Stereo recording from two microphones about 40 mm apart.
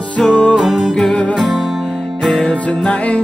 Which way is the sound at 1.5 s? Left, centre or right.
Centre.